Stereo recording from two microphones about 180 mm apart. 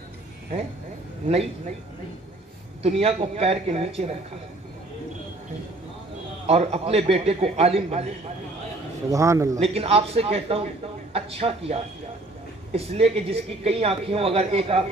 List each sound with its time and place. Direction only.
2.8 s speech: 35° right (ahead or behind)
6.4 s speech: 35° right (ahead or behind)
9.1 s a man's voice: 15° right (ahead or behind)
9.6 s speech: 35° right (ahead or behind)